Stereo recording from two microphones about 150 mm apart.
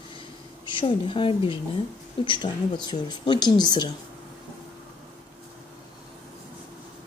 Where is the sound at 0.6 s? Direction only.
30° left (ahead or behind).